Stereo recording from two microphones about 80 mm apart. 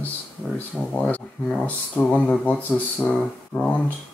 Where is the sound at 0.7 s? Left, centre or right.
Centre.